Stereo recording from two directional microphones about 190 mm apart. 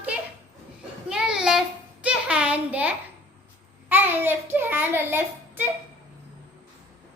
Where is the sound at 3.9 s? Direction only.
10° right (ahead or behind).